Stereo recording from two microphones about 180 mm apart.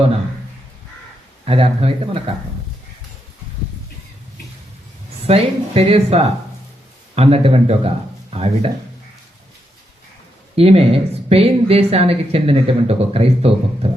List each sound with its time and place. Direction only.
1.5 s speech: 35° right (ahead or behind)
5.2 s speech: 35° right (ahead or behind)
10.5 s speech: 35° right (ahead or behind)